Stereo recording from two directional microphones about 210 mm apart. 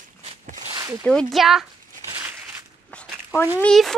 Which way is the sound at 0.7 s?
15° right (ahead or behind).